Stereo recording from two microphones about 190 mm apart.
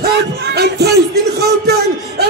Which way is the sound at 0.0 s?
60° right (ahead or behind).